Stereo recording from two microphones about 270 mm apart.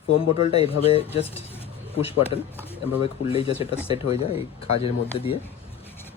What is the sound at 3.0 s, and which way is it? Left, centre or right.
Speech, left.